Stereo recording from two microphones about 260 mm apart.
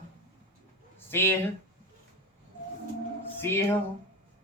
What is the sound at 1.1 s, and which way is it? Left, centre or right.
Speech, centre.